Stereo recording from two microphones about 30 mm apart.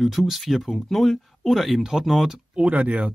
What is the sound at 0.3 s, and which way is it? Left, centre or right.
Speech, centre.